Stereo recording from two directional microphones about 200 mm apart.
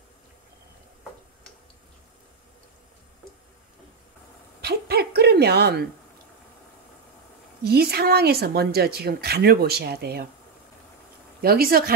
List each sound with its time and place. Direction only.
4.6 s a sound: 55° right (ahead or behind)
7.6 s speech: 50° right (ahead or behind)
11.4 s speech: 50° right (ahead or behind)